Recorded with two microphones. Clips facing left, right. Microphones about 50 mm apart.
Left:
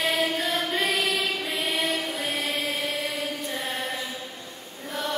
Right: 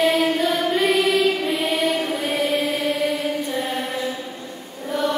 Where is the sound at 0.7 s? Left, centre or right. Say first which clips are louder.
Right 7 dB; centre.